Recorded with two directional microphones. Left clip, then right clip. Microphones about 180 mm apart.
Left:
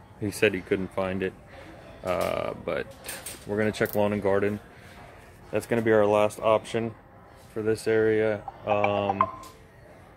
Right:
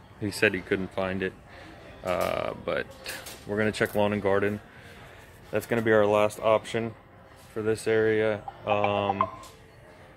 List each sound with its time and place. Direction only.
0.2 s speech: 5° left (ahead or behind)